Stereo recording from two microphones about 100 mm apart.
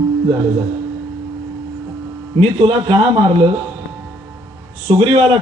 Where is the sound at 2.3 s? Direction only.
65° right (ahead or behind).